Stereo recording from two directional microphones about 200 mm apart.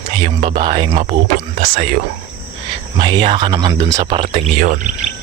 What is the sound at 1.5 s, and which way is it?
Speech, 40° right (ahead or behind).